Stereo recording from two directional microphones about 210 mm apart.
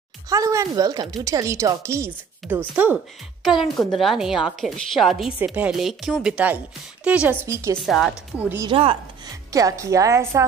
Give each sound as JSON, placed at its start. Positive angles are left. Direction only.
{"t": 0.3, "sound": "a woman's voice", "side_deg": -15}
{"t": 7.8, "sound": "a woman's voice", "side_deg": 0}
{"t": 8.6, "sound": "a woman's voice", "side_deg": -25}